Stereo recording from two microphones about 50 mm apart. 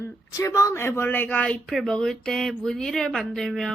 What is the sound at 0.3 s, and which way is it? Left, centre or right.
Speech, left.